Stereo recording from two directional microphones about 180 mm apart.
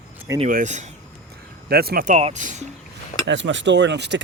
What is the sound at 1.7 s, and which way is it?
Speech, 60° right (ahead or behind).